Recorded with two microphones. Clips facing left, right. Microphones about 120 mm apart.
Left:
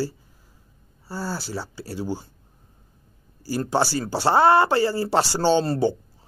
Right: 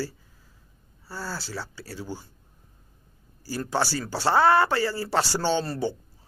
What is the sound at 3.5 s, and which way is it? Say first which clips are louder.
Speech: left 4 dB; 20° left (ahead or behind).